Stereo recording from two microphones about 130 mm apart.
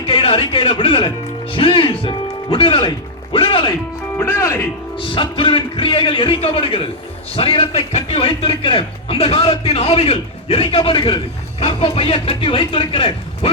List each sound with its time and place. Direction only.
0.1 s a man's voice: 45° left (ahead or behind)
4.2 s speech: 20° left (ahead or behind)
4.9 s a man's voice: 40° left (ahead or behind)